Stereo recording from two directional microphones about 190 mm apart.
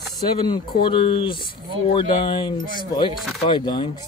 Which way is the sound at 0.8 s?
25° left (ahead or behind).